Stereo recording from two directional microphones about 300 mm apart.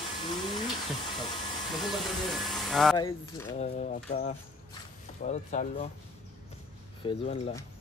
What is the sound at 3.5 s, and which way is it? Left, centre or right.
Speech, left.